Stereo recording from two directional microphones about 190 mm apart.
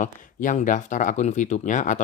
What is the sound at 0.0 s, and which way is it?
A man's voice, 40° left (ahead or behind).